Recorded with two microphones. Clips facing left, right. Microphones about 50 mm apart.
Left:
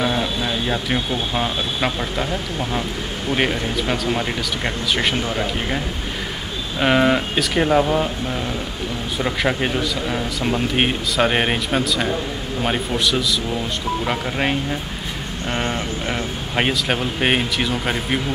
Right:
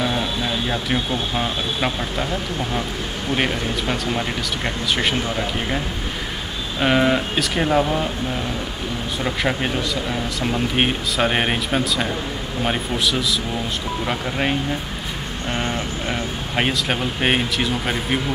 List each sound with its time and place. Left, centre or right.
0.0 s speech: centre
3.3 s speech: centre
6.8 s speech: centre
9.2 s speech: centre
15.5 s speech: centre